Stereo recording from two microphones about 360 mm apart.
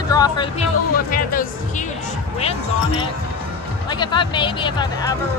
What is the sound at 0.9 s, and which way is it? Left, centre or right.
Speech, left.